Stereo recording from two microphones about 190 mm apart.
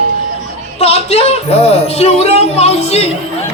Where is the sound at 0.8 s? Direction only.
30° left (ahead or behind).